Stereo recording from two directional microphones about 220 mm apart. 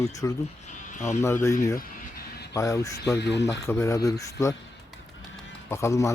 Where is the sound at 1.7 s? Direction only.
40° left (ahead or behind).